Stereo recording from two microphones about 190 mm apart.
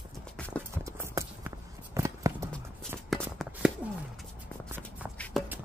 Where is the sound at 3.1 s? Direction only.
Centre (ahead or behind).